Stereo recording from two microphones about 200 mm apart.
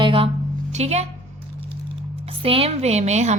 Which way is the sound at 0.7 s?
35° right (ahead or behind).